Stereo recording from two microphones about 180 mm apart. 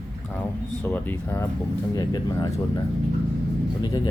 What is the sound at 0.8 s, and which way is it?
Speech, 10° left (ahead or behind).